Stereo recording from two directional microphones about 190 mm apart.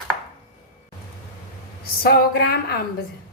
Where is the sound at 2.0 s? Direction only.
55° left (ahead or behind).